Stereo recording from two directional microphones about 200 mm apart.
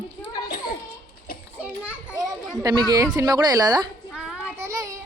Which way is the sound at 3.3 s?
20° right (ahead or behind).